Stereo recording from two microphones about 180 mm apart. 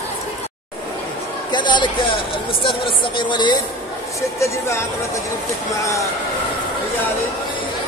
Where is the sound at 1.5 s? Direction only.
25° left (ahead or behind).